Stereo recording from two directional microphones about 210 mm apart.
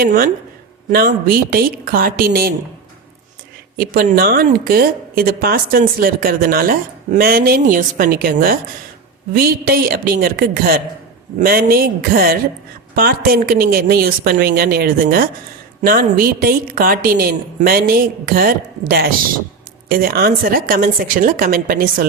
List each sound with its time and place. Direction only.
0.0 s a woman's voice: 45° right (ahead or behind)
3.8 s a woman's voice: 45° right (ahead or behind)